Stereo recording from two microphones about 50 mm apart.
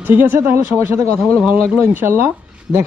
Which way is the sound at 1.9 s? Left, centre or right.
Right.